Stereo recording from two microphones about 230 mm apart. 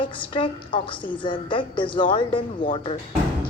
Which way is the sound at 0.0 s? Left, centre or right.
Left.